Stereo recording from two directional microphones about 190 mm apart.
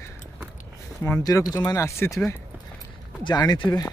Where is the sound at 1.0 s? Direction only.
15° left (ahead or behind).